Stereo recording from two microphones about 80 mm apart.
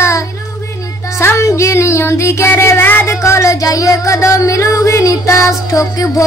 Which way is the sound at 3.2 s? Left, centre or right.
Left.